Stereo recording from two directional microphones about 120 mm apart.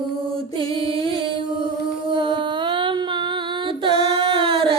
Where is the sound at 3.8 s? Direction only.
50° right (ahead or behind).